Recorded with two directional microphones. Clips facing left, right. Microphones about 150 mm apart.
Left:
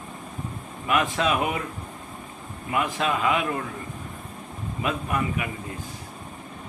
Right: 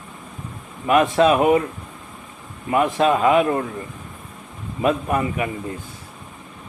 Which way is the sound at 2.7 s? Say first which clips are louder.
Right 8 dB; 40° right (ahead or behind).